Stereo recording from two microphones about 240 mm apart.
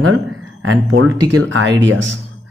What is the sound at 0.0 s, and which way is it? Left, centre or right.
Speech, right.